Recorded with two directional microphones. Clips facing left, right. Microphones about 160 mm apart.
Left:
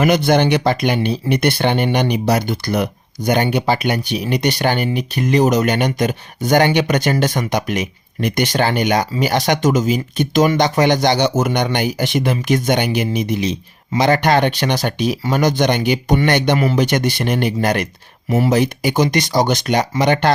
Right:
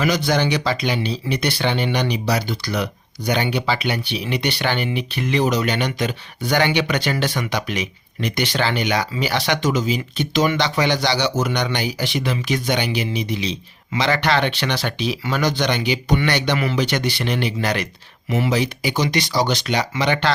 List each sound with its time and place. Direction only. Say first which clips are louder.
0.0 s speech: left 5 dB; 55° left (ahead or behind)